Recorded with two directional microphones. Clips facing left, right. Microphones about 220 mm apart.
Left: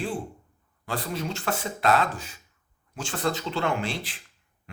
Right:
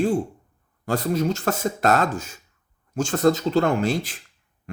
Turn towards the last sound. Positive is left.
turn(degrees=-45)  # may be behind; listen again after turning